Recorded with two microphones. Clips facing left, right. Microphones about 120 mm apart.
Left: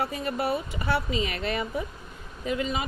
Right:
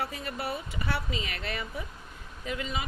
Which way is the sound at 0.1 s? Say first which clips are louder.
Left 7 dB; 20° left (ahead or behind).